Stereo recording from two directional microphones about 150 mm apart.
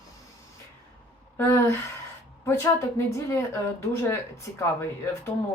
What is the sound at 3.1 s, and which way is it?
Speech, 20° left (ahead or behind).